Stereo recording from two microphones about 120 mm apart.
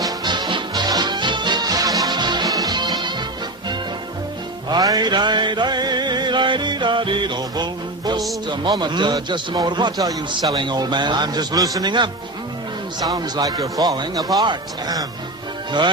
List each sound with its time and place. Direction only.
0.0 s music: 35° right (ahead or behind)
4.7 s music: 30° right (ahead or behind)
8.4 s a man's voice: 40° right (ahead or behind)